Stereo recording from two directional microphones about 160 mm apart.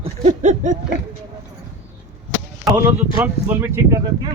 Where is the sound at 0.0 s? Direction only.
50° right (ahead or behind).